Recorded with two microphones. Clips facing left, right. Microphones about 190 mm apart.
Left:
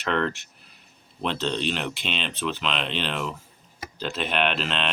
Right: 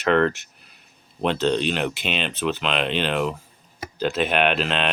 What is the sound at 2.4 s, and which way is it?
Speech, 45° right (ahead or behind).